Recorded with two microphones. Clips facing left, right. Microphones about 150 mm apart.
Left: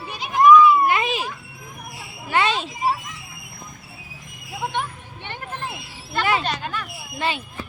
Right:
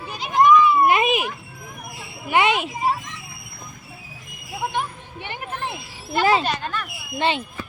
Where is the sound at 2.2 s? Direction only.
15° right (ahead or behind).